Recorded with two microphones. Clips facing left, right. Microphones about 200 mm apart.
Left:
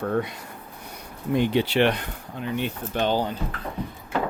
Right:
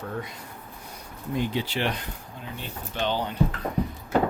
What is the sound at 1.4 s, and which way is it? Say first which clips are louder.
Speech: left 7 dB; 65° left (ahead or behind).